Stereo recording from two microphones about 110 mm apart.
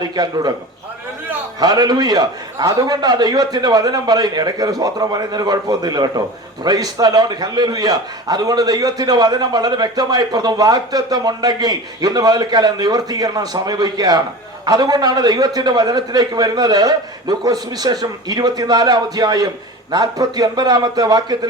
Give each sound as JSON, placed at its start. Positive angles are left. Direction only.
{"t": 0.0, "sound": "a man's voice", "side_deg": -35}
{"t": 1.5, "sound": "a man's voice", "side_deg": -35}